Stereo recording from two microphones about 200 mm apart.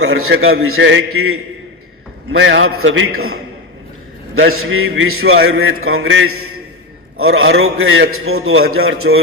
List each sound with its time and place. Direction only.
0.0 s a man's voice: 90° right
0.6 s a man's voice: 80° right
2.3 s a man's voice: 65° right (ahead or behind); by 3.3 s 90° right
4.4 s a man's voice: 80° right
7.3 s a man's voice: 80° right